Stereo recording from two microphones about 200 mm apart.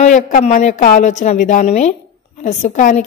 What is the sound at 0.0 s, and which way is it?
A woman's voice, 40° left (ahead or behind).